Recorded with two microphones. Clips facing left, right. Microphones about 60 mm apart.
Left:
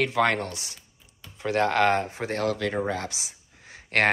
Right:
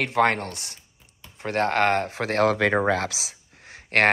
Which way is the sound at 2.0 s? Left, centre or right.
Right.